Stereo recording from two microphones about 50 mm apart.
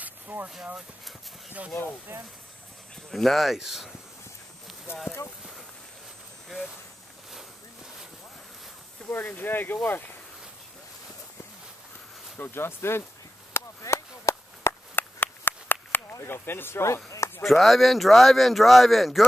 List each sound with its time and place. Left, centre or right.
0.0 s a sound: right
2.1 s speech: right
3.1 s speech: centre
5.1 s speech: left
9.1 s speech: left
12.4 s speech: left
13.5 s chop: left
15.0 s a sound: left
16.8 s speech: left
17.4 s speech: centre